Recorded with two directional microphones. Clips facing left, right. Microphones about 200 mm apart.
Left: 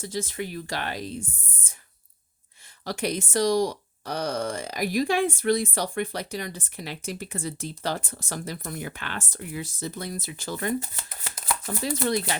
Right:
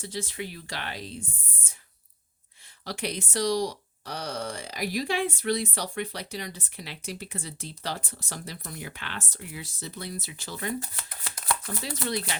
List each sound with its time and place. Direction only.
0.0 s speech: 45° left (ahead or behind)
2.8 s speech: 45° left (ahead or behind)
10.8 s speech: 25° left (ahead or behind)
11.6 s speech: 45° left (ahead or behind)